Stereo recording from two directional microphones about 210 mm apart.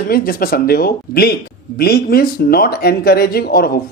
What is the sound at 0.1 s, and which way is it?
Speech, 45° left (ahead or behind).